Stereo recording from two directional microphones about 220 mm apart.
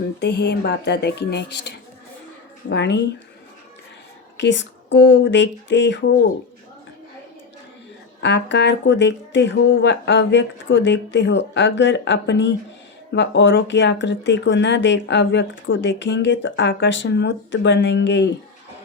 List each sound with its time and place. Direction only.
0.2 s speech: 50° left (ahead or behind)
4.4 s speech: 55° left (ahead or behind)
8.2 s speech: 55° left (ahead or behind)